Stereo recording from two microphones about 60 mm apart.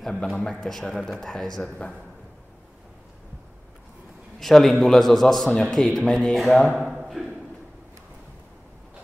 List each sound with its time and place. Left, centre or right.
0.0 s a man's voice: centre
4.4 s a man's voice: centre
6.9 s a sound: centre